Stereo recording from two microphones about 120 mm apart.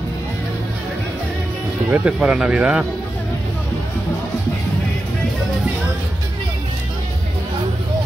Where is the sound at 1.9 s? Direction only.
5° right (ahead or behind).